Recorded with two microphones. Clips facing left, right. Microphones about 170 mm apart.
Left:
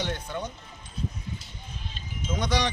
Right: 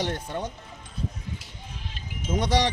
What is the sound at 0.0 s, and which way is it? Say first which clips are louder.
Speech: right 2 dB; 40° right (ahead or behind).